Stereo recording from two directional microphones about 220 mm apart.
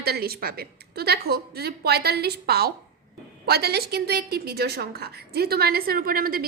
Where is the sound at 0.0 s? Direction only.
45° right (ahead or behind).